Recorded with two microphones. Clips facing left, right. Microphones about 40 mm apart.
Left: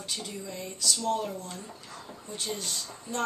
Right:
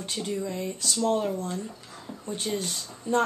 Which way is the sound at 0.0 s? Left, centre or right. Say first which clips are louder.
Right 7 dB; right.